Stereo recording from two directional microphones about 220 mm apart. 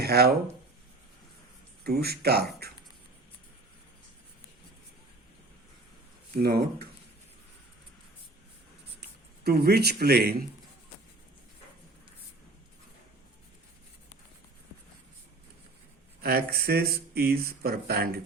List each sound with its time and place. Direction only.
0.0 s speech: 45° right (ahead or behind)
1.8 s speech: 45° right (ahead or behind)
6.3 s speech: 45° right (ahead or behind)
9.4 s speech: 45° right (ahead or behind)
16.2 s speech: 45° right (ahead or behind)